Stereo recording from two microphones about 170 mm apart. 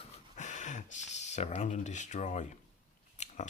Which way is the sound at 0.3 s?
45° left (ahead or behind).